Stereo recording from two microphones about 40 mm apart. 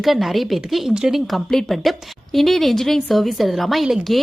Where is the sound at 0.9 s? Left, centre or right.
Centre.